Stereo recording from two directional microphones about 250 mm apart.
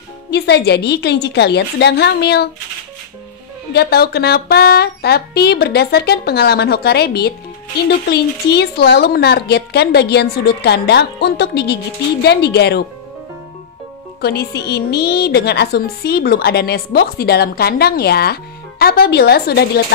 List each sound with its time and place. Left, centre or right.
0.3 s a woman's voice: left
3.7 s a woman's voice: left
14.2 s a woman's voice: left